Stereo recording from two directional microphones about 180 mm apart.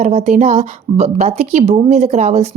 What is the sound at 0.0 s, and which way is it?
A woman's voice, 40° right (ahead or behind).